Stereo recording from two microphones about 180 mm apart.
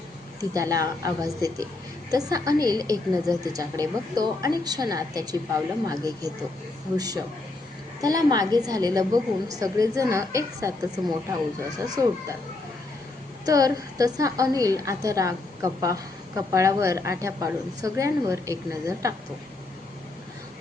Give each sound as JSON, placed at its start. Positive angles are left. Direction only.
{"t": 0.3, "sound": "a woman's voice", "side_deg": -20}
{"t": 13.4, "sound": "a woman's voice", "side_deg": -20}